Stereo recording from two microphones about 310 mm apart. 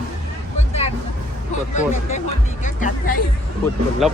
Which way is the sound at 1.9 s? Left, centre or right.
Left.